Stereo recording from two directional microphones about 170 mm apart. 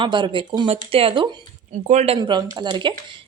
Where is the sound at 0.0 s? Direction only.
30° right (ahead or behind).